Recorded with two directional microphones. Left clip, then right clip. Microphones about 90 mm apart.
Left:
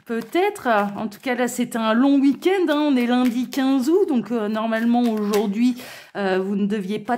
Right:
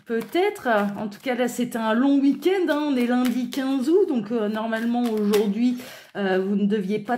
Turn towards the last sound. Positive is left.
turn(degrees=45)  # may be behind; listen again after turning